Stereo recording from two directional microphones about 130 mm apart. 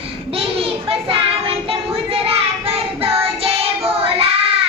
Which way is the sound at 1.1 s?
45° right (ahead or behind).